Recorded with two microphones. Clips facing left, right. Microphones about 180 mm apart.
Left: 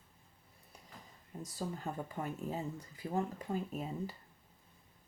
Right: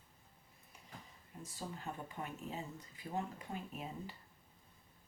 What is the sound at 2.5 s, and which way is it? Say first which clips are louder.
Speech: left 6 dB; 40° left (ahead or behind).